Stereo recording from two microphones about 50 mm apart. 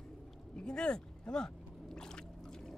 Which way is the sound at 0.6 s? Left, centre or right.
Centre.